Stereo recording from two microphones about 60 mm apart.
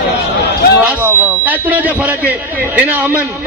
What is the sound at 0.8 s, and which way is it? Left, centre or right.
A man's voice, right.